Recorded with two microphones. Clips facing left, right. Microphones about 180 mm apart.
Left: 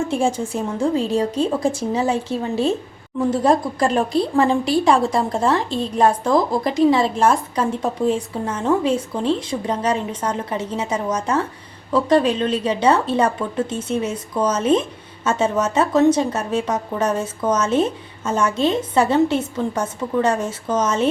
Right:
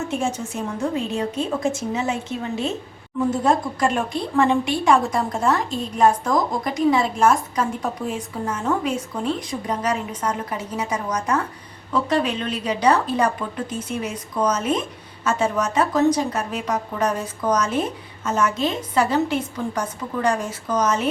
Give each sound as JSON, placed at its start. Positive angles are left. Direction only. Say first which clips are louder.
{"t": 0.0, "sound": "a woman's voice", "louder": "left 5 dB", "side_deg": 30}